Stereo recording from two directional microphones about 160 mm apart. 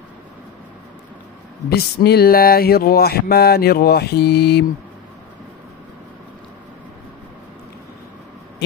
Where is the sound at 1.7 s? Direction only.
80° left.